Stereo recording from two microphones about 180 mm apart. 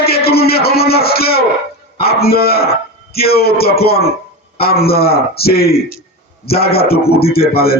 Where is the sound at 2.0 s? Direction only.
60° left (ahead or behind).